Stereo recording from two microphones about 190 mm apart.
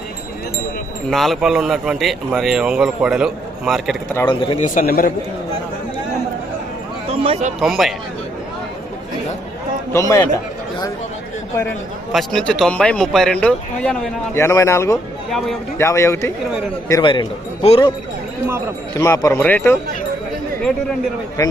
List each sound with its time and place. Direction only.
1.1 s speech: centre (ahead or behind)
4.3 s a man's voice: 25° left (ahead or behind)
4.6 s a man's voice: 45° left (ahead or behind)
7.1 s speech: 30° right (ahead or behind)
7.6 s speech: centre (ahead or behind)
9.9 s speech: 15° left (ahead or behind)
12.1 s speech: 5° left (ahead or behind)
15.3 s speech: centre (ahead or behind)
15.8 s speech: 15° left (ahead or behind)
16.9 s a man's voice: 25° left (ahead or behind)
18.9 s speech: 20° left (ahead or behind)
21.4 s speech: 20° left (ahead or behind)